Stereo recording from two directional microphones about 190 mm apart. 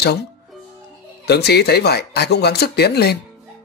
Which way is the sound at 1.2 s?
60° left (ahead or behind).